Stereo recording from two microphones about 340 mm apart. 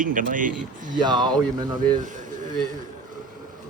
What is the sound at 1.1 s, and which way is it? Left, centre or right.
Speech, centre.